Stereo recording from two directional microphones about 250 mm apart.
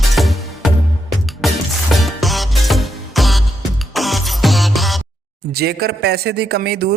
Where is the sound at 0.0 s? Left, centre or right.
Centre.